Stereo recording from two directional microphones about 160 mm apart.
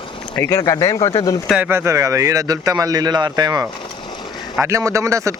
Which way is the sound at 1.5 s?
10° right (ahead or behind).